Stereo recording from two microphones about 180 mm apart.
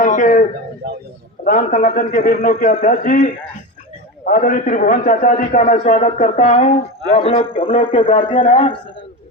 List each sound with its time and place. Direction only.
0.0 s a sound: 45° left (ahead or behind)
1.5 s a man's voice: 55° left (ahead or behind)
6.0 s a man's voice: 35° left (ahead or behind)